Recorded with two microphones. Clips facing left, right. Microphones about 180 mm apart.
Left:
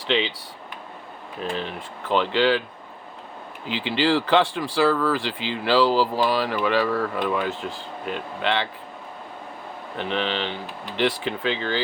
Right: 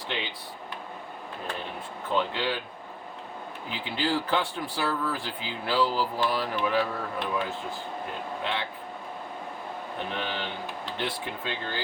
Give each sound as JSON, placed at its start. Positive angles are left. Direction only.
{"t": 0.1, "sound": "speech", "side_deg": 90}
{"t": 1.4, "sound": "speech", "side_deg": 90}
{"t": 3.7, "sound": "speech", "side_deg": 90}
{"t": 10.0, "sound": "speech", "side_deg": 90}